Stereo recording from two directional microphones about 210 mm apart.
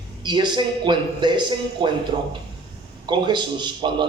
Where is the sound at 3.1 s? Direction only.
20° right (ahead or behind).